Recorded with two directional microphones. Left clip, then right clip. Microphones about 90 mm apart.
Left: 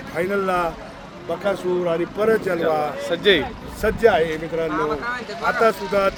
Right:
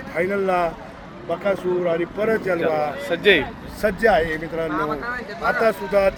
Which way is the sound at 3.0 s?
20° left (ahead or behind).